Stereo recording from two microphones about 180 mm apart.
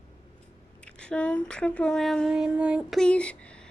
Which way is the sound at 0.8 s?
5° left (ahead or behind).